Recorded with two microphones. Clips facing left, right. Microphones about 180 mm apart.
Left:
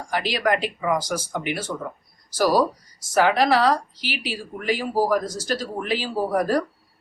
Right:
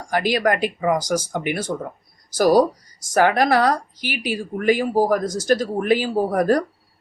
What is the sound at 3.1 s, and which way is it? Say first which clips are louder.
Speech: right 2 dB; 50° right (ahead or behind).